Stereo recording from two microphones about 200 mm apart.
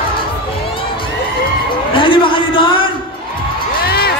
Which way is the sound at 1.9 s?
25° left (ahead or behind).